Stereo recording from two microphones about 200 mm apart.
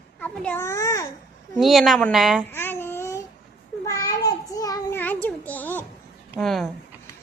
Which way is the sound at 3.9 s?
20° left (ahead or behind).